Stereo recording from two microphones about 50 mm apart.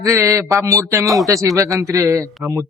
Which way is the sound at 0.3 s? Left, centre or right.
Right.